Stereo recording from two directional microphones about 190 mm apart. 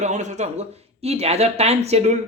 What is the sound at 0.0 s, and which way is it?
A man's voice, 40° right (ahead or behind).